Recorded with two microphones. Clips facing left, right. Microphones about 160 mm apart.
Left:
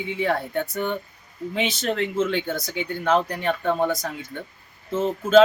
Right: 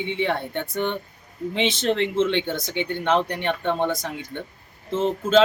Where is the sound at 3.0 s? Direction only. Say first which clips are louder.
Left 1 dB; 5° left (ahead or behind).